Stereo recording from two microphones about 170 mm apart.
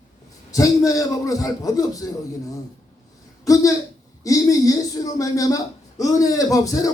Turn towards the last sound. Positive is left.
turn(degrees=20)  # may be behind; listen again after turning